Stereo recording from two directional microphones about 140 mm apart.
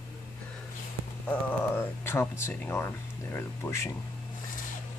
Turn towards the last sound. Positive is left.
turn(degrees=20)  # may be behind; listen again after turning